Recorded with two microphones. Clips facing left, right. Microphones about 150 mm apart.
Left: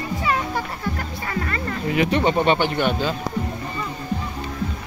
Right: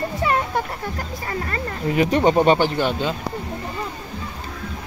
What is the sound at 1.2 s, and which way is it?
Speech, 30° right (ahead or behind).